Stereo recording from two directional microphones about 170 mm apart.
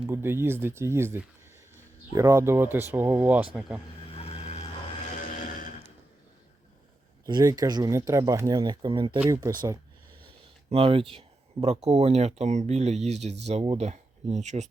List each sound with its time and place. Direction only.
0.1 s speech: 15° right (ahead or behind)
4.2 s vehicle: 40° left (ahead or behind)
5.2 s a sound: 50° left (ahead or behind)
7.3 s speech: 25° right (ahead or behind)
9.1 s speech: 15° right (ahead or behind)
10.7 s speech: 35° right (ahead or behind)